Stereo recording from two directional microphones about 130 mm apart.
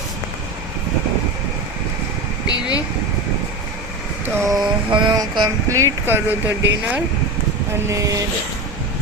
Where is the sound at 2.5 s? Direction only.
35° left (ahead or behind).